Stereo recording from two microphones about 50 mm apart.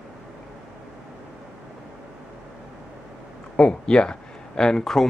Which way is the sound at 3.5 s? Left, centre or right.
Centre.